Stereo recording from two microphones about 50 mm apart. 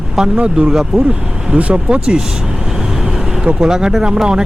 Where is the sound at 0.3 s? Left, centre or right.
Right.